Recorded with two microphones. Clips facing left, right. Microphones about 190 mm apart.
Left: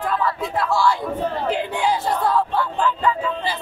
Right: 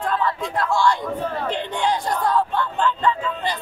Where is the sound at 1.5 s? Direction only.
5° left (ahead or behind).